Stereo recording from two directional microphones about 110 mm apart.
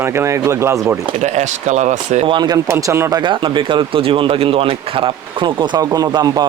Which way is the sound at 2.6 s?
25° right (ahead or behind).